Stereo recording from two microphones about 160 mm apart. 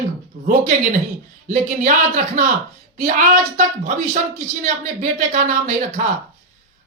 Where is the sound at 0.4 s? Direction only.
55° right (ahead or behind).